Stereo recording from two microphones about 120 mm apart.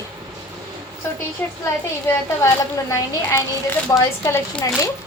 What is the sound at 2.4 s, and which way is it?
A woman's voice, 25° left (ahead or behind).